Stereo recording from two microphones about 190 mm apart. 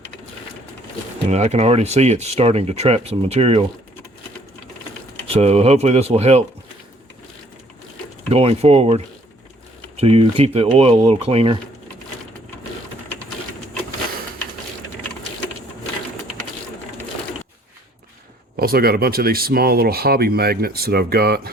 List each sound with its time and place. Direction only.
1.3 s speech: 35° right (ahead or behind)
5.4 s speech: 35° right (ahead or behind)
8.3 s speech: 30° right (ahead or behind)
10.0 s speech: 30° right (ahead or behind)
18.5 s speech: 50° right (ahead or behind)